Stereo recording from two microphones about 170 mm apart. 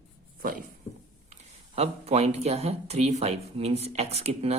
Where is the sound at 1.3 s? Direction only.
40° right (ahead or behind).